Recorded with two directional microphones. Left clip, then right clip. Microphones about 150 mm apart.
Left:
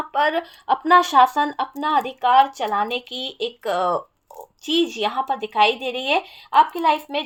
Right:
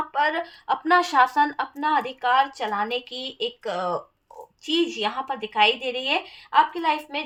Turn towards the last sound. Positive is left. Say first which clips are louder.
# left 5 dB
turn(degrees=45)  # may be behind; listen again after turning